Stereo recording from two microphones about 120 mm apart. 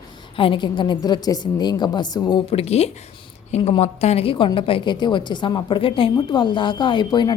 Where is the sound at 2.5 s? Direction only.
60° left (ahead or behind).